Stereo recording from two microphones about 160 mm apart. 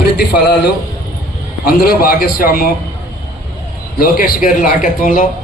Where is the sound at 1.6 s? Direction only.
70° left (ahead or behind).